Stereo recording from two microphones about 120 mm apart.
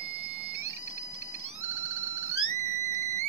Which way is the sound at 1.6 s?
25° right (ahead or behind).